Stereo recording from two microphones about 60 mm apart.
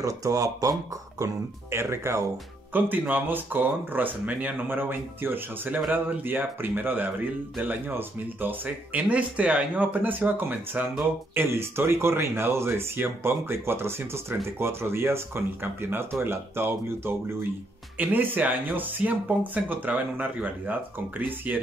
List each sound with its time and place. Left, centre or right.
0.0 s speech: right
1.2 s speech: right
2.7 s speech: right
17.9 s speech: right